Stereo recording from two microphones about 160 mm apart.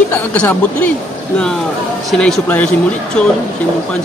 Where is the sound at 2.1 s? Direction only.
Centre (ahead or behind).